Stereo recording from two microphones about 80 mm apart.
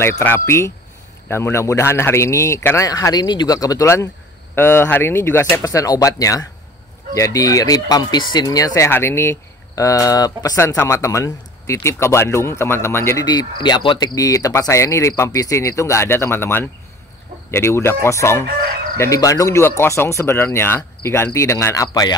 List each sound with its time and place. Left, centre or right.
0.2 s speech: left
2.9 s speech: left
3.8 s speech: left
5.6 s speech: left
8.8 s speech: left
9.8 s speech: left
10.8 s speech: left
13.2 s speech: left
19.0 s speech: left
19.8 s speech: left